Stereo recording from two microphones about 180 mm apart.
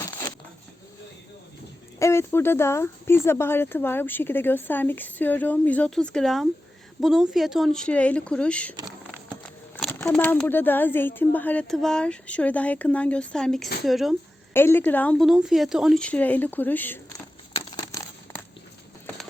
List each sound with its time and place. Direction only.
2.0 s speech: 15° left (ahead or behind); by 14.2 s centre (ahead or behind)
14.5 s speech: 10° left (ahead or behind)
17.5 s a sound: 20° left (ahead or behind)